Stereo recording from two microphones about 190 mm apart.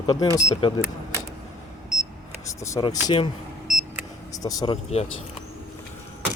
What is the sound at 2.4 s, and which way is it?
Speech, 20° left (ahead or behind).